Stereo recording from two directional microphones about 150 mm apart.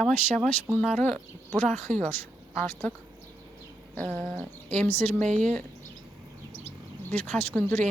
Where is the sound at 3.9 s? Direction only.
10° left (ahead or behind).